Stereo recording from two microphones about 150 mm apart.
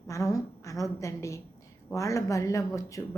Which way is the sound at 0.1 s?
25° left (ahead or behind).